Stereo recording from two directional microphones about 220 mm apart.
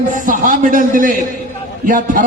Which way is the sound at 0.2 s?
35° right (ahead or behind).